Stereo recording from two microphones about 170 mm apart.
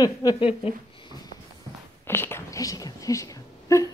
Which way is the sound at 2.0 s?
15° left (ahead or behind).